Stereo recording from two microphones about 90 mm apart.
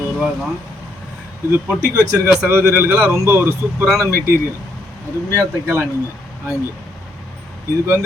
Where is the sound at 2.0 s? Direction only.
40° right (ahead or behind).